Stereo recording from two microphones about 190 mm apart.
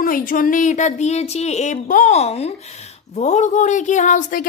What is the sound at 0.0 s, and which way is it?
Speech, 45° left (ahead or behind).